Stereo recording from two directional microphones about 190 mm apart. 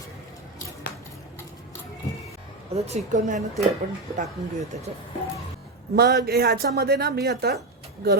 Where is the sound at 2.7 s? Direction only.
35° right (ahead or behind).